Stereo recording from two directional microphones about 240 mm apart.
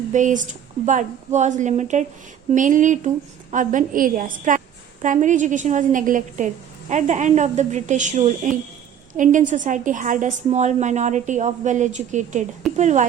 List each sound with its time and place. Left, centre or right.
0.1 s a woman's voice: right